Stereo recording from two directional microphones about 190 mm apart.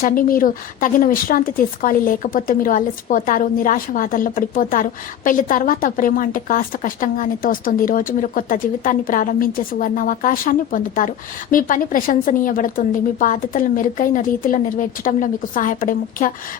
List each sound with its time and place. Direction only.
0.0 s speech: 45° left (ahead or behind)